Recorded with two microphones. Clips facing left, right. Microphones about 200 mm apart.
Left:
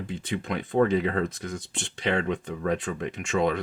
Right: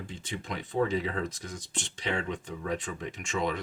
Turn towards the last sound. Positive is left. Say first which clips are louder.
# left 6 dB
turn(degrees=60)  # may be behind; listen again after turning